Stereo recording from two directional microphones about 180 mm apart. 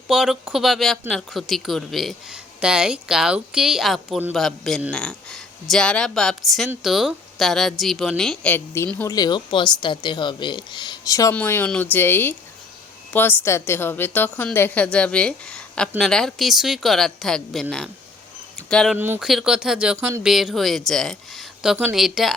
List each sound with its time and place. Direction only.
0.1 s a woman's voice: 5° right (ahead or behind)
18.9 s speech: 10° right (ahead or behind)